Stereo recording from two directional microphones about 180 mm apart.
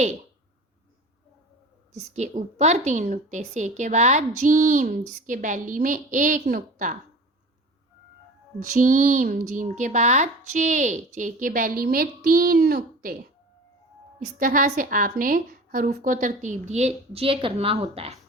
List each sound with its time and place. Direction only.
2.1 s a woman's voice: 40° right (ahead or behind)
8.6 s speech: 45° right (ahead or behind)
14.3 s speech: 50° right (ahead or behind); by 18.2 s 35° right (ahead or behind)